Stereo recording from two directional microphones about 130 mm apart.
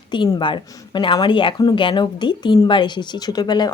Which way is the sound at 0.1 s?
35° left (ahead or behind).